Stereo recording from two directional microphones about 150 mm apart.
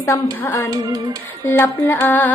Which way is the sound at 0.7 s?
25° right (ahead or behind).